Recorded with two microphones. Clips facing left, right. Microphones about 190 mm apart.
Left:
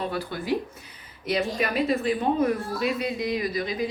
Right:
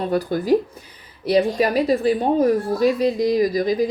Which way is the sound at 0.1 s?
40° right (ahead or behind).